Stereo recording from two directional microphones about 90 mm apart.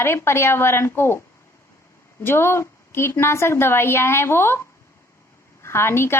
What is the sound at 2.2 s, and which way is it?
A woman's voice, 25° left (ahead or behind).